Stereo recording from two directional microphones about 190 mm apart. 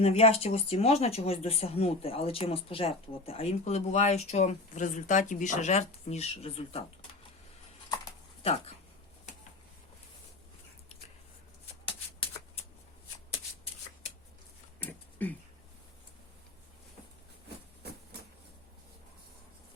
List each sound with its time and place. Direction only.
0.0 s speech: 30° left (ahead or behind)
8.4 s speech: 30° left (ahead or behind)
14.8 s a sound: 10° left (ahead or behind)